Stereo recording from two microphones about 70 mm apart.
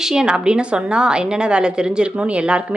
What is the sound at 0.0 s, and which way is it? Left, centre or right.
A woman's voice, centre.